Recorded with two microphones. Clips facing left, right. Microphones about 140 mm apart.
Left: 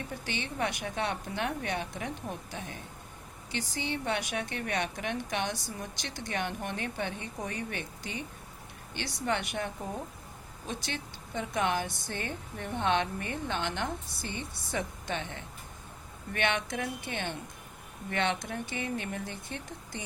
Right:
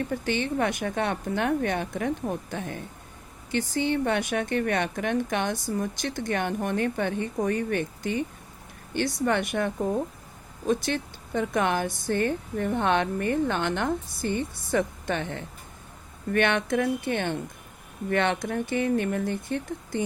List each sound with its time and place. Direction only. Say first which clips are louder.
0.3 s a woman's voice: right 7 dB; 50° right (ahead or behind)